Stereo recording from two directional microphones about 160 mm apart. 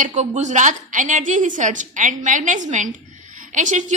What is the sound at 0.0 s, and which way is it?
A woman's voice, 45° right (ahead or behind).